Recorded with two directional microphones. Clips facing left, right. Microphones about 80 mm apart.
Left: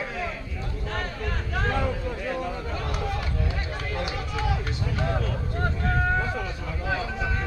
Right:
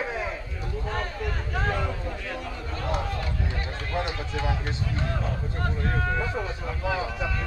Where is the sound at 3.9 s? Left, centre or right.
Right.